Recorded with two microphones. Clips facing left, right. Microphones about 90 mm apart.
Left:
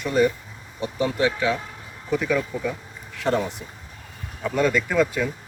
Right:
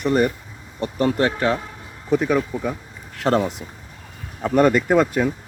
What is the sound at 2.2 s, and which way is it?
Speech, 35° right (ahead or behind).